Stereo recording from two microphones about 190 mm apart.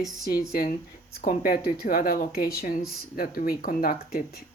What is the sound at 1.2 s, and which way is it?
Speech, 50° left (ahead or behind).